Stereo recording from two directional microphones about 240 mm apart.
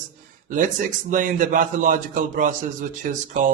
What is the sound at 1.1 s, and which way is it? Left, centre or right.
A man's voice, right.